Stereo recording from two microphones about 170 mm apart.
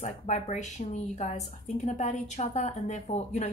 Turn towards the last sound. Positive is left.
turn(degrees=40)  # may be behind; listen again after turning